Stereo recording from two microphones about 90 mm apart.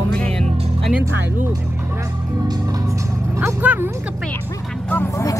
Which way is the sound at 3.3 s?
25° right (ahead or behind).